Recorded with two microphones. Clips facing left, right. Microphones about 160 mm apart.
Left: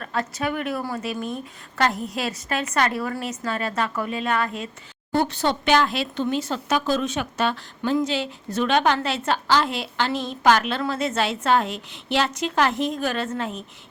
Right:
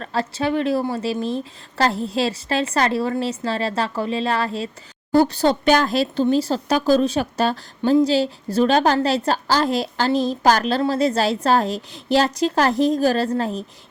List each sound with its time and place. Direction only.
0.0 s a woman's voice: 30° right (ahead or behind)